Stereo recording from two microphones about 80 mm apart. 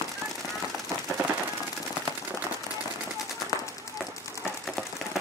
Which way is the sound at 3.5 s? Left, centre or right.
Left.